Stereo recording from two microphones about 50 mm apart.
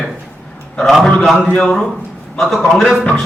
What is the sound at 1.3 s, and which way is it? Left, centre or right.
Speech, left.